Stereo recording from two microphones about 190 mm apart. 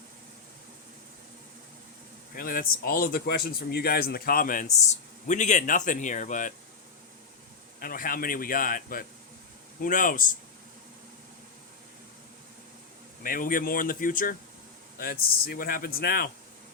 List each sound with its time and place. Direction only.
2.3 s speech: 50° left (ahead or behind)
7.8 s speech: 50° left (ahead or behind)
13.2 s speech: 45° left (ahead or behind)